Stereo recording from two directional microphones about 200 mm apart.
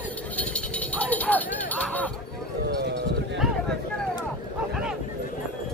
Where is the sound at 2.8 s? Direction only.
55° right (ahead or behind).